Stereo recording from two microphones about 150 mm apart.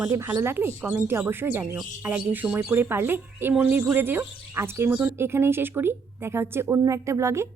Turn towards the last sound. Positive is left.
turn(degrees=-20)  # may be behind; listen again after turning